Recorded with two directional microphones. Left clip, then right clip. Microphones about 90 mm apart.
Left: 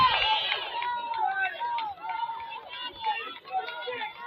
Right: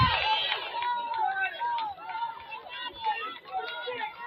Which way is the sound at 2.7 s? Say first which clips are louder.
Even; 55° right (ahead or behind).